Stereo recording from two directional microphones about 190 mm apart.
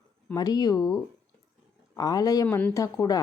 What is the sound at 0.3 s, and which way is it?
Speech, 20° left (ahead or behind).